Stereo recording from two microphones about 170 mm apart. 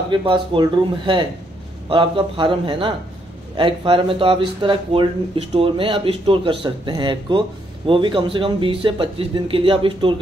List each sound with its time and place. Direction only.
0.1 s speech: 30° right (ahead or behind)